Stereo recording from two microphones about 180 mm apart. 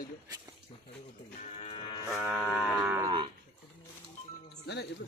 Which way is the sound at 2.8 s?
10° right (ahead or behind).